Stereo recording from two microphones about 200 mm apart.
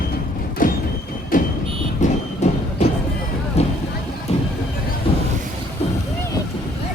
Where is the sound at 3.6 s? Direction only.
35° left (ahead or behind).